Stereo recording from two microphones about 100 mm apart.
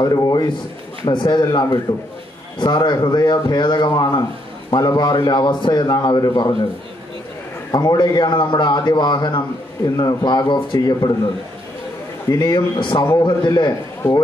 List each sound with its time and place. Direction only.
0.0 s a man's voice: 45° left (ahead or behind)
7.7 s a man's voice: 40° left (ahead or behind)
12.3 s a man's voice: 40° left (ahead or behind)